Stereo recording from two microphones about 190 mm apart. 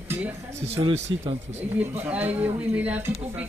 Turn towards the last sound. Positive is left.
turn(degrees=-10)  # may be behind; listen again after turning